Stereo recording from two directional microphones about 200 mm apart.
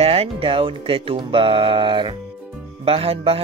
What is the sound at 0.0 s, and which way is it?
Speech, 30° right (ahead or behind).